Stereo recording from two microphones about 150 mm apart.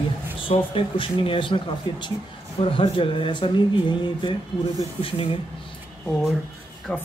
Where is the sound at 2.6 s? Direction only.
35° left (ahead or behind).